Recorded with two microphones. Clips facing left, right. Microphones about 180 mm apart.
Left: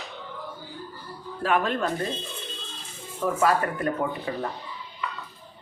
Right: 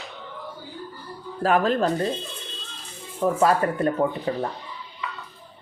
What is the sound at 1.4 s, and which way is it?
Speech, 35° right (ahead or behind).